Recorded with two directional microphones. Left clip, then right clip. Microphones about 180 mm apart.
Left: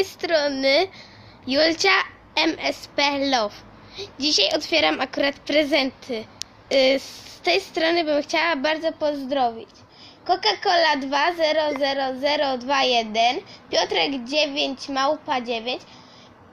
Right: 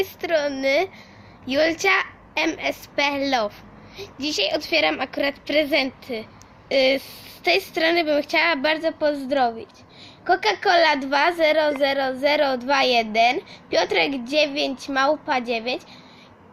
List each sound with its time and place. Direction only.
0.0 s a woman's voice: 5° left (ahead or behind); by 15.8 s 20° right (ahead or behind)